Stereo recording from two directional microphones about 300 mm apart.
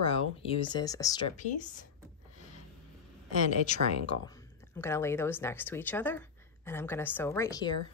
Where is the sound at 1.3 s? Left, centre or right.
Left.